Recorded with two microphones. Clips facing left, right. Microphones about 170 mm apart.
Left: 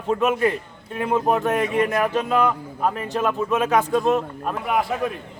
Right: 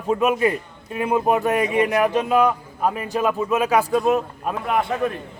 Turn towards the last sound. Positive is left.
turn(degrees=0)  # may be behind; listen again after turning